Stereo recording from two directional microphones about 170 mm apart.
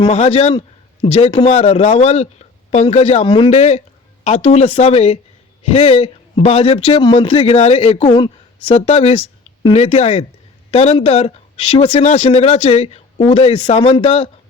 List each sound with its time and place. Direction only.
0.0 s speech: 40° left (ahead or behind)